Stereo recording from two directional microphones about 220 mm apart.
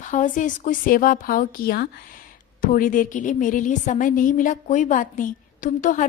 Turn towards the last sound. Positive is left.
turn(degrees=35)  # may be behind; listen again after turning